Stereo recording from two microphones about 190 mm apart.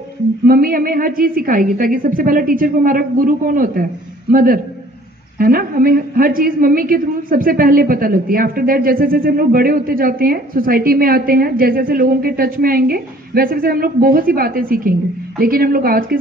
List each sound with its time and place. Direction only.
0.5 s a woman's voice: 50° right (ahead or behind)